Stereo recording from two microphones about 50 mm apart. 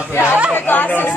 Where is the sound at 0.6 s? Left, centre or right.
Left.